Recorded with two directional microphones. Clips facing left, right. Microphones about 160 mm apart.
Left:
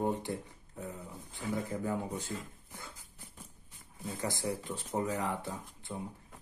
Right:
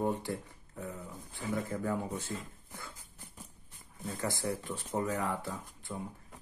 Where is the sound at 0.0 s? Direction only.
20° left (ahead or behind).